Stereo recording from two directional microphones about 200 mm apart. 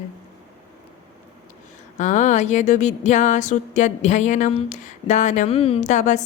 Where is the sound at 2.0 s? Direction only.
40° left (ahead or behind).